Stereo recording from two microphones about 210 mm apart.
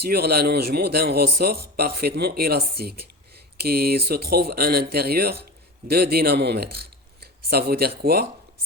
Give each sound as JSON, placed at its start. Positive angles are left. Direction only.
{"t": 0.0, "sound": "speech", "side_deg": -50}